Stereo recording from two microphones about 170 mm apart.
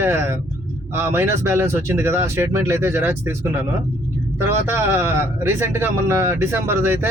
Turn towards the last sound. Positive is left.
turn(degrees=-10)  # may be behind; listen again after turning